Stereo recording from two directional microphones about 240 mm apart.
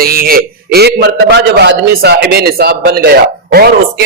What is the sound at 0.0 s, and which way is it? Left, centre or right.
A man's voice, right.